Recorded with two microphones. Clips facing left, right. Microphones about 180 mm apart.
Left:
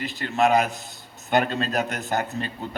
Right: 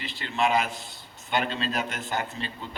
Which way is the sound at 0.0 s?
45° left (ahead or behind).